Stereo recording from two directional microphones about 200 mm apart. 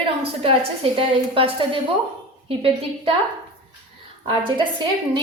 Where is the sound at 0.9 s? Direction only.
25° right (ahead or behind).